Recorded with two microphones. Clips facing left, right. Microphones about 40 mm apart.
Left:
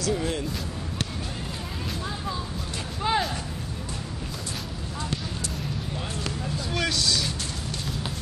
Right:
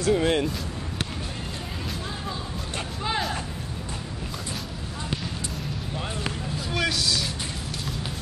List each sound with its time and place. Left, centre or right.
0.0 s speech: right
3.0 s a sound: centre
6.7 s vehicle: centre